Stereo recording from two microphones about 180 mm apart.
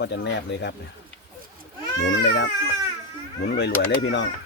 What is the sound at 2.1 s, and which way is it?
Speech, 75° left (ahead or behind).